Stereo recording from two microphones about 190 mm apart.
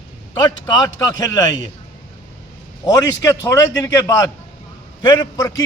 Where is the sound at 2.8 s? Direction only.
20° left (ahead or behind).